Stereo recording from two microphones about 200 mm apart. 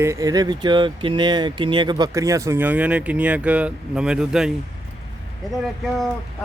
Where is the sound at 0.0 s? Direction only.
15° right (ahead or behind).